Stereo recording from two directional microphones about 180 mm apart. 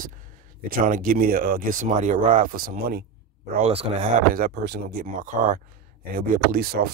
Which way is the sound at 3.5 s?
35° right (ahead or behind).